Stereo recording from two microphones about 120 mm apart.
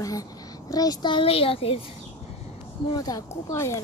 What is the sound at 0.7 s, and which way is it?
A child's voice, 30° left (ahead or behind).